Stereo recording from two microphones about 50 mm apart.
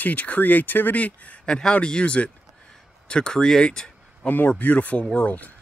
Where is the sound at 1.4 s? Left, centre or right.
Centre.